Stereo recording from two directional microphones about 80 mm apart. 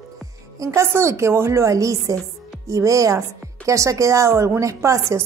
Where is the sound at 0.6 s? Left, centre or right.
Right.